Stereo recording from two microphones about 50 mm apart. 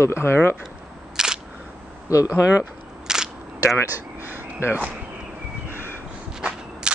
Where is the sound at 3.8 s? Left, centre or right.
Right.